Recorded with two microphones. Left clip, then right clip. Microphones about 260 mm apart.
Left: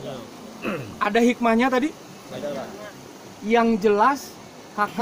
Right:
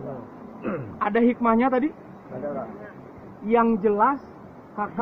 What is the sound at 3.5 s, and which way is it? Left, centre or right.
Speech, left.